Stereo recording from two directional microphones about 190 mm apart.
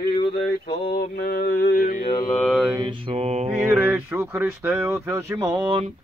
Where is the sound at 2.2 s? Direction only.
5° left (ahead or behind).